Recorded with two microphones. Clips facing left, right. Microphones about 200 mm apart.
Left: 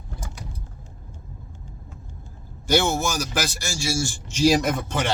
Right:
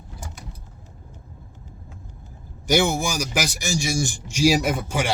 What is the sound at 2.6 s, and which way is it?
A man's voice, 15° right (ahead or behind).